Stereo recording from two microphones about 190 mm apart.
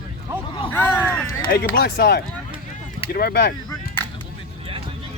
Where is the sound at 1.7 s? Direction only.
55° left (ahead or behind).